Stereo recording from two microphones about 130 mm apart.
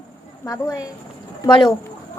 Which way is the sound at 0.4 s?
25° left (ahead or behind).